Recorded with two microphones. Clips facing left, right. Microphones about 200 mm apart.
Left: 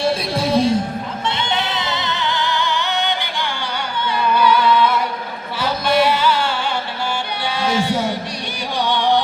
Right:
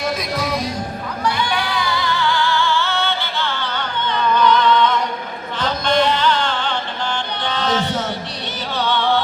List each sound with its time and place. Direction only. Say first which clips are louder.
0.0 s music: left 3 dB; 30° left (ahead or behind)